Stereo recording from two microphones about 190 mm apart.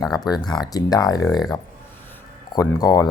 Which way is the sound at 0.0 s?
20° left (ahead or behind).